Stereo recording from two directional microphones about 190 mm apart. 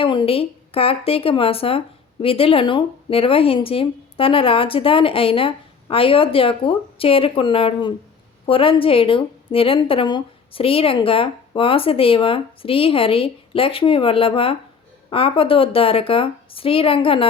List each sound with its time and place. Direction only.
0.0 s a woman's voice: 25° left (ahead or behind)